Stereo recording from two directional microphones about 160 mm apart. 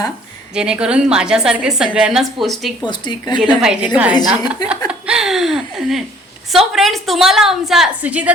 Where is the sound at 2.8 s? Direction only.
30° left (ahead or behind).